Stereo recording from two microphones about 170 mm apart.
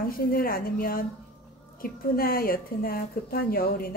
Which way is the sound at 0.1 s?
60° left (ahead or behind).